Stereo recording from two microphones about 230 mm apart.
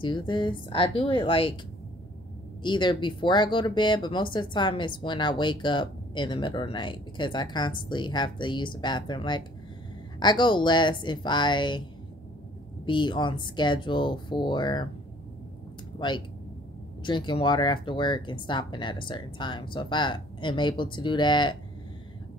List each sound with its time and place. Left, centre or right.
0.0 s speech: left
2.6 s speech: centre
12.8 s speech: left
17.0 s speech: centre